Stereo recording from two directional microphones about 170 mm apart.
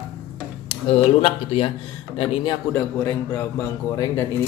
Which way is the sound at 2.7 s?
10° left (ahead or behind).